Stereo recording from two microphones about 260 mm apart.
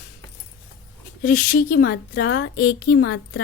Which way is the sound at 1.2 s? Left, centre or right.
Left.